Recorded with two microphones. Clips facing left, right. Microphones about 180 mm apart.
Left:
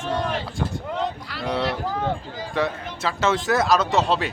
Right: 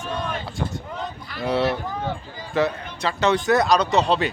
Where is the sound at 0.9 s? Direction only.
75° left (ahead or behind).